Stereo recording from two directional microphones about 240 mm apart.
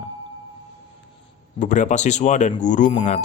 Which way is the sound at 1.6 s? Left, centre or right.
Left.